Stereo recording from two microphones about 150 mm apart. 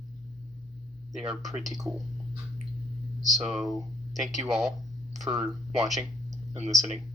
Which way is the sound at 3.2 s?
Centre (ahead or behind).